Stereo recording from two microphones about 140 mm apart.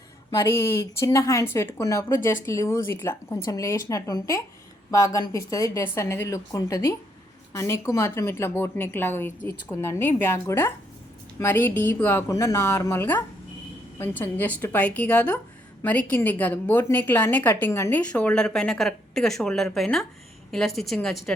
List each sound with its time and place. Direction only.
0.3 s speech: 20° left (ahead or behind)
18.1 s speech: 10° left (ahead or behind)